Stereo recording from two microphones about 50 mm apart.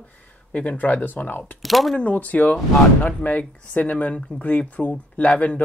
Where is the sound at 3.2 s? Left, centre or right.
Left.